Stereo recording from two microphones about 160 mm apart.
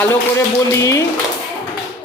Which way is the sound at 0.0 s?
15° left (ahead or behind).